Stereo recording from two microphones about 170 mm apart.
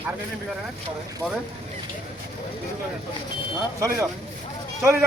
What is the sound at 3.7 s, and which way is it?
Speech, 15° right (ahead or behind).